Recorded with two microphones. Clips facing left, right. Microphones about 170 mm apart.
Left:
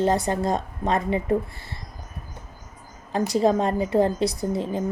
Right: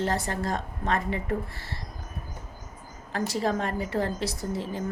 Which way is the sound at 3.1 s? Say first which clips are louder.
Left 7 dB; 20° left (ahead or behind).